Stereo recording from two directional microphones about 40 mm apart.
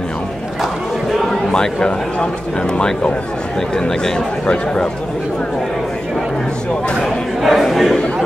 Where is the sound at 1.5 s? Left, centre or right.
Centre.